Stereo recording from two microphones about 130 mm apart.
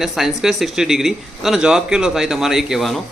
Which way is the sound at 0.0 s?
Centre (ahead or behind).